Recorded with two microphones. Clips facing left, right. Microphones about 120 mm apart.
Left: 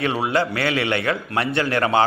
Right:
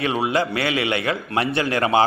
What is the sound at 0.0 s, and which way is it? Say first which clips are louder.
A man's voice: even; 25° right (ahead or behind).